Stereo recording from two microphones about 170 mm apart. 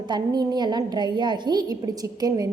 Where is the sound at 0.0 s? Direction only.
25° right (ahead or behind).